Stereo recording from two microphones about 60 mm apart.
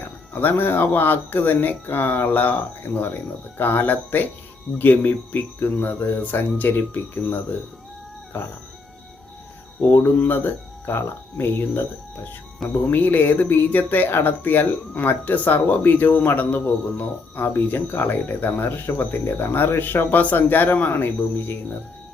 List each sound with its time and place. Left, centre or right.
0.0 s speech: left
8.3 s speech: left
9.8 s speech: left